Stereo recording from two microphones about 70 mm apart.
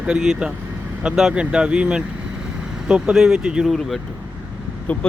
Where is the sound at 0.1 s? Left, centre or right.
Centre.